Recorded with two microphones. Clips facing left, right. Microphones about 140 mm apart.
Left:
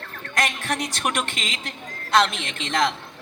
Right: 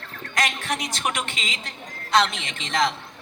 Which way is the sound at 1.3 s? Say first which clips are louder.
Left 1 dB; 55° left (ahead or behind).